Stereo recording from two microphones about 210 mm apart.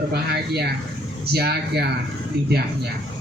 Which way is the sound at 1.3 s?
50° right (ahead or behind).